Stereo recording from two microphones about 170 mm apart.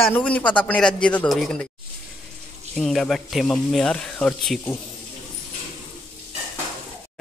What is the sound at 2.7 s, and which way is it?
Speech, centre (ahead or behind).